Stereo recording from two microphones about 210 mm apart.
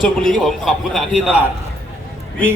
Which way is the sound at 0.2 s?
Centre (ahead or behind).